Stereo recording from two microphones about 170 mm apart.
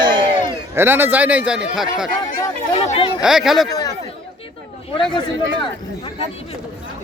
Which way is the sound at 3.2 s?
5° right (ahead or behind).